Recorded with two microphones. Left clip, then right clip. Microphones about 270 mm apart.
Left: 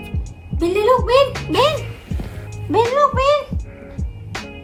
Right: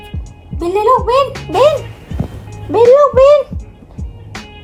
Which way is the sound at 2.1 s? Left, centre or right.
Centre.